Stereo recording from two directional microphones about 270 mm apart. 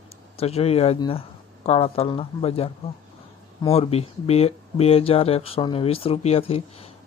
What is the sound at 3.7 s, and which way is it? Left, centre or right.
Speech, left.